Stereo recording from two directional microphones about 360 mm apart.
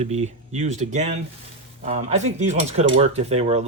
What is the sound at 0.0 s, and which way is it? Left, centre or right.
Speech, centre.